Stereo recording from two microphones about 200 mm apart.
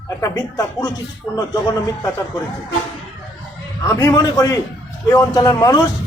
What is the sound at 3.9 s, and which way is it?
Speech, 15° left (ahead or behind).